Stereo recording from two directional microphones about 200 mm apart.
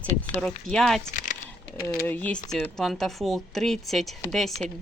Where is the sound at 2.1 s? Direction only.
10° left (ahead or behind).